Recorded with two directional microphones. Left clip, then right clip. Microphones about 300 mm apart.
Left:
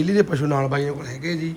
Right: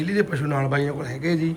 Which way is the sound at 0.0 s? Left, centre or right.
Centre.